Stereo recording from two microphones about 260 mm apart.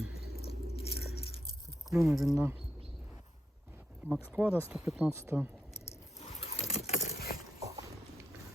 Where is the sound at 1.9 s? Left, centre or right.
Centre.